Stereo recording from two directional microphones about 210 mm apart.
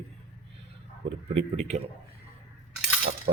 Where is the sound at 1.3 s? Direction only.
30° right (ahead or behind).